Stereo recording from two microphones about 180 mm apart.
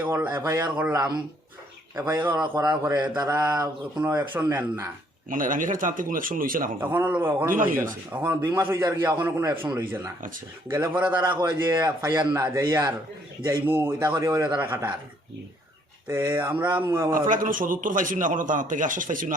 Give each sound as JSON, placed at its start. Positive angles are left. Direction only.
{"t": 0.0, "sound": "a man's voice", "side_deg": -10}
{"t": 0.9, "sound": "a man's voice", "side_deg": -20}
{"t": 2.1, "sound": "a man's voice", "side_deg": -10}
{"t": 3.2, "sound": "a man's voice", "side_deg": -10}
{"t": 3.5, "sound": "a man's voice", "side_deg": -25}
{"t": 4.0, "sound": "a man's voice", "side_deg": -10}
{"t": 5.3, "sound": "a man's voice", "side_deg": -45}
{"t": 6.7, "sound": "a man's voice", "side_deg": -10}
{"t": 7.5, "sound": "a man's voice", "side_deg": -50}
{"t": 8.1, "sound": "a man's voice", "side_deg": -10}
{"t": 11.2, "sound": "a man's voice", "side_deg": -25}
{"t": 16.0, "sound": "a man's voice", "side_deg": -15}
{"t": 17.2, "sound": "a man's voice", "side_deg": -50}